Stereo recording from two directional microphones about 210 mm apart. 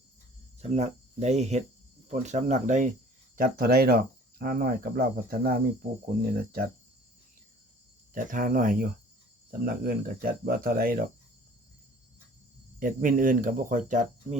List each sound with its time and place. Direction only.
0.6 s speech: 30° right (ahead or behind)
8.1 s speech: 40° right (ahead or behind)
12.8 s speech: 40° right (ahead or behind)